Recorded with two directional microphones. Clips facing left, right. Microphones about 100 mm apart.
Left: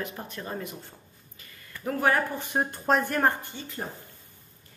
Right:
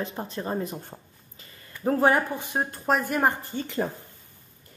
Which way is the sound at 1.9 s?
25° right (ahead or behind).